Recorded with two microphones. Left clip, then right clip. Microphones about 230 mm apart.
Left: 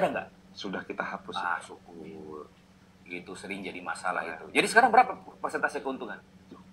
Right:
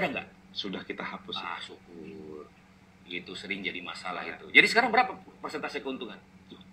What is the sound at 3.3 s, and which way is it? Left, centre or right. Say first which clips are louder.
A man's voice: right 5 dB; centre.